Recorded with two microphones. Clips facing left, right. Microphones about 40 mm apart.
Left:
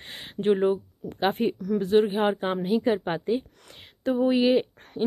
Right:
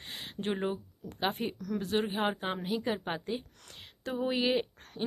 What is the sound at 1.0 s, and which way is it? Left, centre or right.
Speech, left.